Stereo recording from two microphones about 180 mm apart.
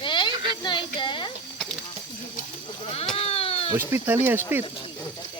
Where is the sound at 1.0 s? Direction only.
25° left (ahead or behind).